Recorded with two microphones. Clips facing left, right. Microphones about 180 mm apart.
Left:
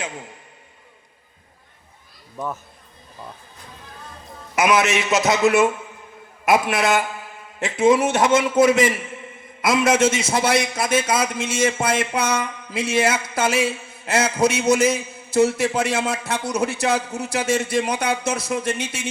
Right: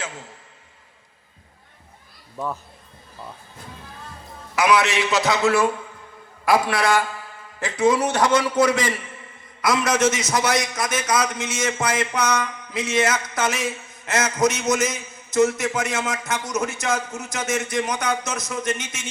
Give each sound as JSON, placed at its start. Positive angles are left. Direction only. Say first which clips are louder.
{"t": 0.0, "sound": "a man's voice", "louder": "left 3 dB", "side_deg": 20}
{"t": 4.5, "sound": "a man's voice", "louder": "left 1 dB", "side_deg": 20}